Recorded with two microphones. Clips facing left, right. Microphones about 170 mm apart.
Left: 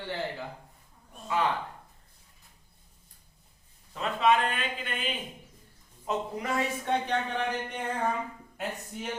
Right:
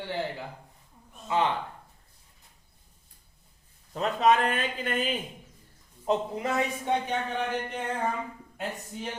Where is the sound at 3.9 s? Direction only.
40° right (ahead or behind).